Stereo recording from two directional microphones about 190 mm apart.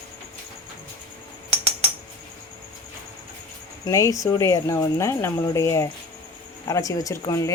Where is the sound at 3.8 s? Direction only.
15° left (ahead or behind).